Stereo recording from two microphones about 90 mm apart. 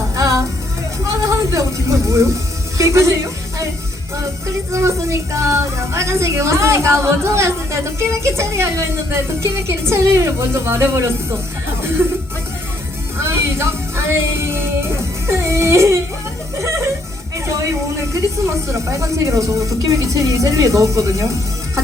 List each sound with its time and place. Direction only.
1.0 s goat: 35° right (ahead or behind)
2.7 s a woman's voice: 35° right (ahead or behind)
4.7 s a woman's voice: 35° right (ahead or behind)
12.0 s music: 30° right (ahead or behind)
13.2 s music: 30° right (ahead or behind)
18.1 s a woman's voice: 35° right (ahead or behind)